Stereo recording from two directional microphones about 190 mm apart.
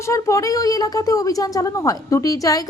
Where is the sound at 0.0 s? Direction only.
15° left (ahead or behind).